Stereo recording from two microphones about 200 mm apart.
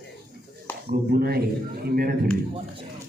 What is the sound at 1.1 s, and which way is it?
A man's voice, 50° right (ahead or behind).